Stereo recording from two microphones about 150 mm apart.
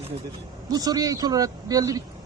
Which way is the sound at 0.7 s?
25° right (ahead or behind).